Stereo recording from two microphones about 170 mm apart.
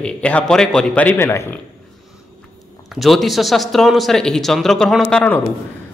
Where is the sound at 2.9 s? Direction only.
Centre (ahead or behind).